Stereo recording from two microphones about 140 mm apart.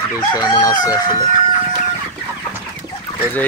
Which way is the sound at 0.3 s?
30° left (ahead or behind).